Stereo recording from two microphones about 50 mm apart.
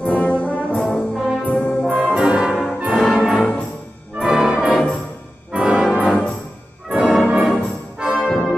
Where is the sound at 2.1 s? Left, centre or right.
Centre.